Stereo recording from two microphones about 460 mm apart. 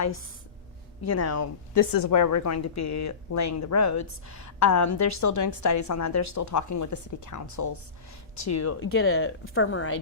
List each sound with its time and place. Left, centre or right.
1.0 s a woman's voice: left